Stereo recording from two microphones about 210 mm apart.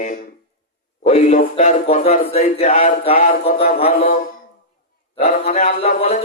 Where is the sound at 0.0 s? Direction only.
35° left (ahead or behind).